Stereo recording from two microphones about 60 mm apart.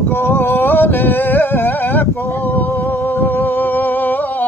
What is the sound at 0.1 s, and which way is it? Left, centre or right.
Music, left.